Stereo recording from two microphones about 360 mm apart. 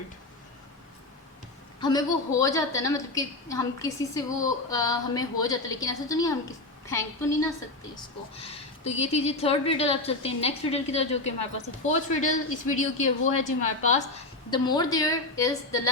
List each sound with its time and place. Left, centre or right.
1.8 s a woman's voice: centre